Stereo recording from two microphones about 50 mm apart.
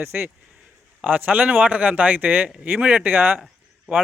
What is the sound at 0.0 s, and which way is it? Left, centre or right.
Speech, right.